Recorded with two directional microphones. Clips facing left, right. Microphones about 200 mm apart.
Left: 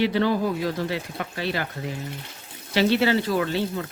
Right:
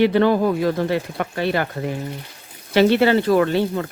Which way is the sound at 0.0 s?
55° right (ahead or behind).